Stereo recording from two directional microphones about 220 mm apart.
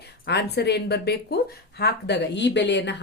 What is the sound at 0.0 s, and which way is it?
Speech, 50° left (ahead or behind).